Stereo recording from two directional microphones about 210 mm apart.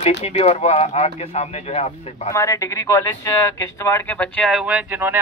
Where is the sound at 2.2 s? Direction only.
15° left (ahead or behind).